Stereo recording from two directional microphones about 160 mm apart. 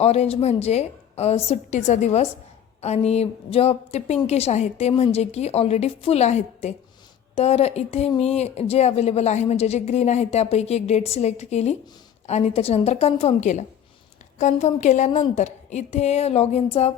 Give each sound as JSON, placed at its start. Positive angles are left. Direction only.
{"t": 0.0, "sound": "a woman's voice", "side_deg": 40}